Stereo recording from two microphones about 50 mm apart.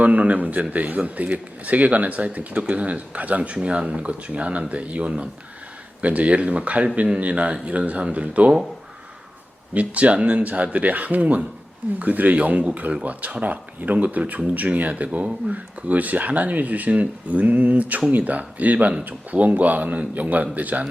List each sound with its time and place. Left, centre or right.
0.0 s speech: right
9.7 s speech: right